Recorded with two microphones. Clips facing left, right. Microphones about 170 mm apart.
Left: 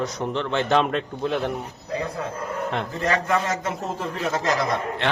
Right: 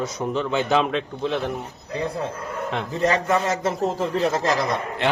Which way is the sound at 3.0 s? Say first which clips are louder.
Right 3 dB; 25° right (ahead or behind).